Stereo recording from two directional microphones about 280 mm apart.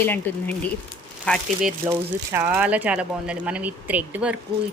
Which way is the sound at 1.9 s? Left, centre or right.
Centre.